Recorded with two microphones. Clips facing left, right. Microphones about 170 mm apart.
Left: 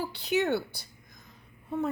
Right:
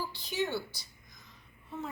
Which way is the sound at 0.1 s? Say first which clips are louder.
Left 7 dB; 65° left (ahead or behind).